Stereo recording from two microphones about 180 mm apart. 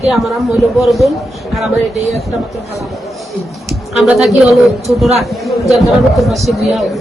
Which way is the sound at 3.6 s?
Centre (ahead or behind).